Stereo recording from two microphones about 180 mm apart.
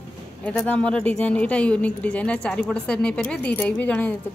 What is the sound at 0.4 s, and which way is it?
A woman's voice, 5° left (ahead or behind).